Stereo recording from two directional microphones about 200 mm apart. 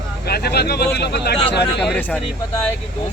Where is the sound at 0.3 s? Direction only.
50° left (ahead or behind).